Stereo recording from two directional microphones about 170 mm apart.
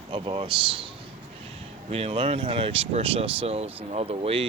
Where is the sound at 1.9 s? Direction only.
35° right (ahead or behind).